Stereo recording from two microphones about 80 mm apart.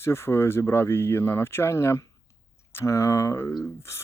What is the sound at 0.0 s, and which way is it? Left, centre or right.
Speech, left.